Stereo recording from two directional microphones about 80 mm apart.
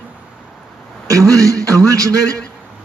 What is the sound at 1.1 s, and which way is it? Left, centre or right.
Speech, right.